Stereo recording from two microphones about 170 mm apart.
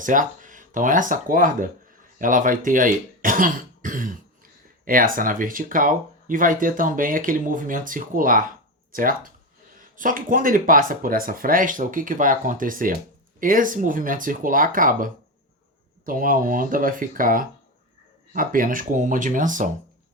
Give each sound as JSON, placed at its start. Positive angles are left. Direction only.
{"t": 0.0, "sound": "speech", "side_deg": -50}